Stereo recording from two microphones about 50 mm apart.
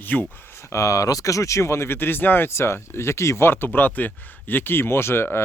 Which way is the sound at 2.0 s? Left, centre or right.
Left.